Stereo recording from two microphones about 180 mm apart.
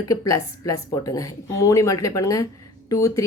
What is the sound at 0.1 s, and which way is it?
A woman's voice, 20° left (ahead or behind).